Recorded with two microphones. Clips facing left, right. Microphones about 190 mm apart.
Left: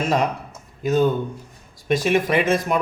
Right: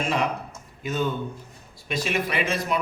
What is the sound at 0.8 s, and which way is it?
Speech, 40° left (ahead or behind).